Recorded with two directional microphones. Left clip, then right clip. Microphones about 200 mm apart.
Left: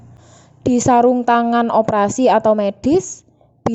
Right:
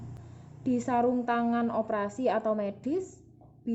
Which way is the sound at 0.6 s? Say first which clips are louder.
Left 15 dB; 50° left (ahead or behind).